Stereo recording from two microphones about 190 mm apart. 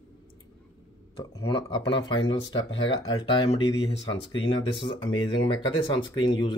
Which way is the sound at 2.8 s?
25° left (ahead or behind).